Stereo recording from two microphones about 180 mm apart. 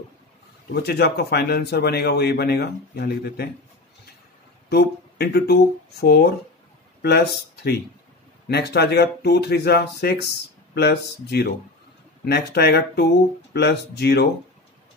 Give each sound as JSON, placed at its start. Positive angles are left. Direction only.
{"t": 0.7, "sound": "speech", "side_deg": 65}
{"t": 4.6, "sound": "speech", "side_deg": 65}
{"t": 8.5, "sound": "speech", "side_deg": 65}